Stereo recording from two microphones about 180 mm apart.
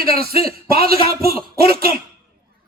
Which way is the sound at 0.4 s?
55° right (ahead or behind).